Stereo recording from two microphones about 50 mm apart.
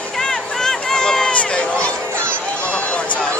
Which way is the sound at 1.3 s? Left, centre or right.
Left.